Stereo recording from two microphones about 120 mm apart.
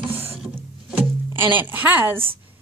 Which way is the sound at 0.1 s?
55° right (ahead or behind).